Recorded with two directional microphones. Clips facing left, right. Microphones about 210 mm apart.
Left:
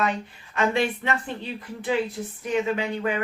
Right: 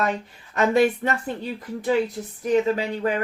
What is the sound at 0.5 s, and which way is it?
Speech, 40° right (ahead or behind).